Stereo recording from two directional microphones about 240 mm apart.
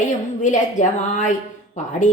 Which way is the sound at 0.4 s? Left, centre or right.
Left.